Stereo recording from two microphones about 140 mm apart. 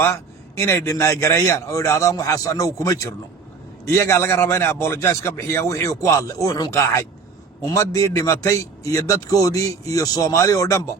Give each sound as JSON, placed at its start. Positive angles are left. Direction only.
{"t": 0.6, "sound": "a man's voice", "side_deg": 20}